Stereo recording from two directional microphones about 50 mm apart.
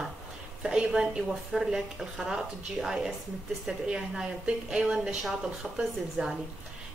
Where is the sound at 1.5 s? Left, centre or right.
Centre.